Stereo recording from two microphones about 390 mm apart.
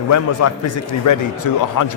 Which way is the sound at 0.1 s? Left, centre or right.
Left.